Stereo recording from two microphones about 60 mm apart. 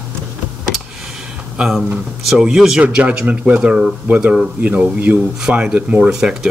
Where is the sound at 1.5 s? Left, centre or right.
Centre.